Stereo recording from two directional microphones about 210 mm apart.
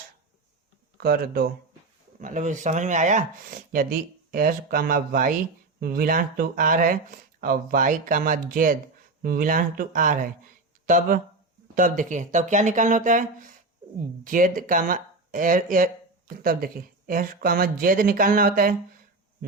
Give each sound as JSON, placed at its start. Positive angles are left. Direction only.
{"t": 0.9, "sound": "speech", "side_deg": -45}
{"t": 14.3, "sound": "speech", "side_deg": -40}